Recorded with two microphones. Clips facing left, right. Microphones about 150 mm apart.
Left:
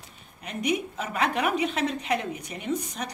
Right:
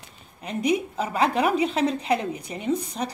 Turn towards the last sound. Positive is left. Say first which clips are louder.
# right 4 dB
turn(degrees=-30)  # may be behind; listen again after turning